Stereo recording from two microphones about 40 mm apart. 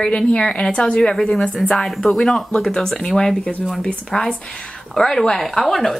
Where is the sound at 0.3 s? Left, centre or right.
Left.